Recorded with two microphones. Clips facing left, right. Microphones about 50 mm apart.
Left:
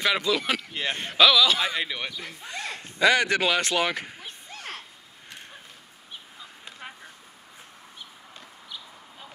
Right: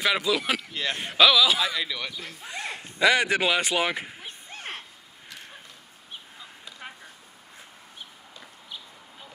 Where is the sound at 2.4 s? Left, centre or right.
Centre.